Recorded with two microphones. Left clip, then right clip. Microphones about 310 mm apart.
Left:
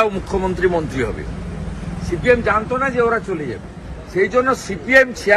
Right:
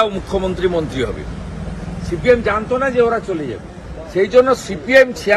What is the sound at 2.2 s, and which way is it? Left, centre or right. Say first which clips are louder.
Speech: right 1 dB; centre.